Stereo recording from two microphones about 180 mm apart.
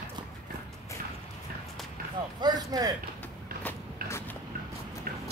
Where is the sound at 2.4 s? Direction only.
20° right (ahead or behind).